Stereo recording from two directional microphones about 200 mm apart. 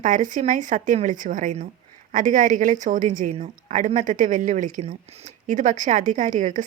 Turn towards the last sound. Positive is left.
turn(degrees=-40)  # may be behind; listen again after turning